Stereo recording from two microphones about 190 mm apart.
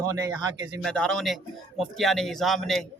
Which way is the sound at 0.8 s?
5° left (ahead or behind).